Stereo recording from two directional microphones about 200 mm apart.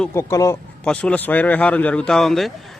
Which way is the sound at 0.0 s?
15° left (ahead or behind).